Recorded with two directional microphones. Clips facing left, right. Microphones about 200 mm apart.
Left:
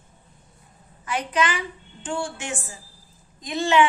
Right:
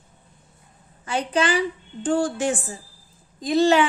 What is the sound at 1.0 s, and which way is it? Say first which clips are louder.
A woman's voice: right 2 dB; 30° right (ahead or behind).